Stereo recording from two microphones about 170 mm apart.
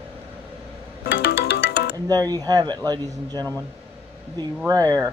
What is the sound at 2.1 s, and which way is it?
Speech, 20° right (ahead or behind).